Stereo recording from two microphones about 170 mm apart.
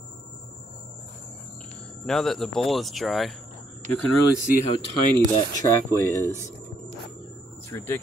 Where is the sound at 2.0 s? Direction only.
Centre (ahead or behind).